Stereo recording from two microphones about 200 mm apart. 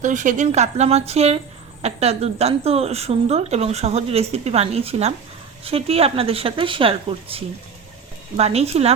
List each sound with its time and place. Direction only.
0.0 s a woman's voice: 40° right (ahead or behind)